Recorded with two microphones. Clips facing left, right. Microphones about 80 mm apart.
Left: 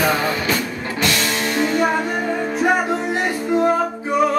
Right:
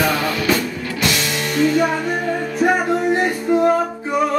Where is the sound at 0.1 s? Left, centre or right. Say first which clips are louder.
Right 1 dB; left.